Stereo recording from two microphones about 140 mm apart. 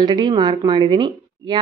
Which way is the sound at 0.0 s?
30° right (ahead or behind).